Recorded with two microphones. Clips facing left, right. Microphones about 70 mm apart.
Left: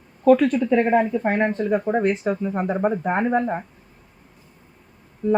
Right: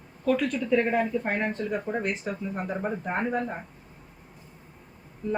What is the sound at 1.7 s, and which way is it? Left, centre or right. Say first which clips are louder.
Speech: left 8 dB; left.